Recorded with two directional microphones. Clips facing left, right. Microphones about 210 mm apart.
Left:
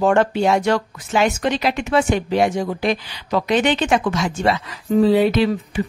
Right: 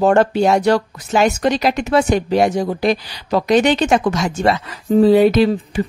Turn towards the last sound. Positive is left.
turn(degrees=-40)  # may be behind; listen again after turning